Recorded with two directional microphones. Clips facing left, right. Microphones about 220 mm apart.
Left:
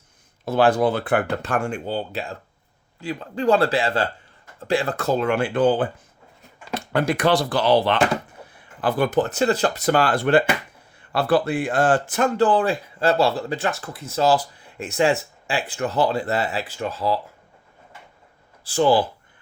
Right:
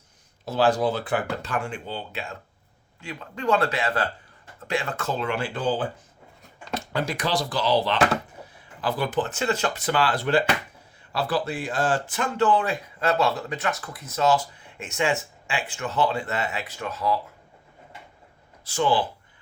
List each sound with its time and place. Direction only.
0.4 s speech: 55° left (ahead or behind); by 17.2 s 30° left (ahead or behind)
18.6 s speech: 35° left (ahead or behind)